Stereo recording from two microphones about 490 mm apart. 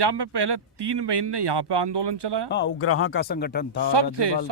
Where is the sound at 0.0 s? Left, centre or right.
Right.